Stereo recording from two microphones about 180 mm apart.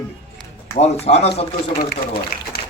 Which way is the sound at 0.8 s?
35° left (ahead or behind).